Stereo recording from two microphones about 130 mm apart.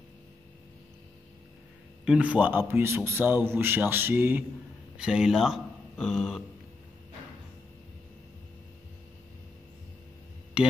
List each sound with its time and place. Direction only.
2.0 s a man's voice: 10° right (ahead or behind)